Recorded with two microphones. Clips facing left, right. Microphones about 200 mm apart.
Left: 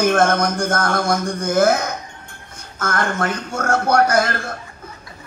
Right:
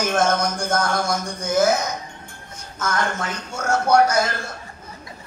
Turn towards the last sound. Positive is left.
turn(degrees=55)  # may be behind; listen again after turning